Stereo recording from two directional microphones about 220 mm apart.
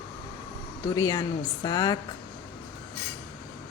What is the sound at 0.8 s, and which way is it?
Speech, 15° left (ahead or behind).